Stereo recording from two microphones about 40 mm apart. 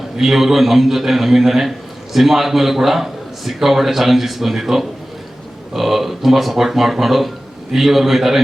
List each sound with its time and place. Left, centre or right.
0.2 s a man's voice: centre